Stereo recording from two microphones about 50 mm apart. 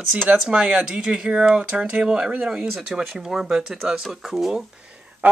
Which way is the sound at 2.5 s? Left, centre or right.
Centre.